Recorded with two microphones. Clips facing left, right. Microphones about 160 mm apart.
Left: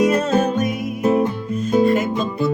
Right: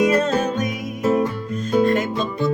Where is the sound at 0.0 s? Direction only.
5° left (ahead or behind).